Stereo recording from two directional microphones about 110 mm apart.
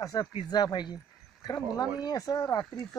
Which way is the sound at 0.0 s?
35° left (ahead or behind).